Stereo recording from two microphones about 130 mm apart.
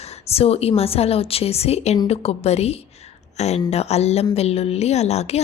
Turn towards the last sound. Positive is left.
turn(degrees=55)  # may be behind; listen again after turning